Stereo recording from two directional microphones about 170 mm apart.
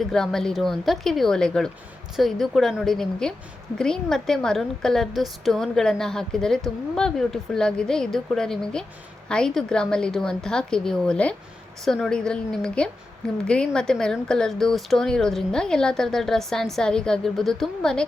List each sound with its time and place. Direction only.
0.0 s speech: centre (ahead or behind)